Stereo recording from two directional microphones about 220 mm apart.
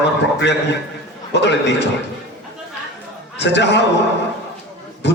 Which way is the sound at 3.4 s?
50° left (ahead or behind).